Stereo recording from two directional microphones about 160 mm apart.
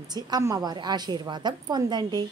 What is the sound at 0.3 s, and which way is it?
A woman's voice, 20° right (ahead or behind).